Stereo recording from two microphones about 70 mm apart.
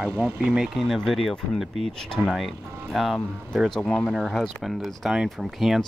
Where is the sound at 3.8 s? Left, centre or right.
Centre.